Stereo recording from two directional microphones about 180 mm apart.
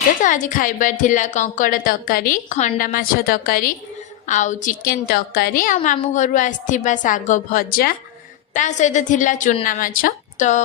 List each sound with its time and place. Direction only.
0.2 s a woman's voice: 45° left (ahead or behind)
4.3 s a woman's voice: 45° left (ahead or behind)
8.5 s a woman's voice: 40° left (ahead or behind)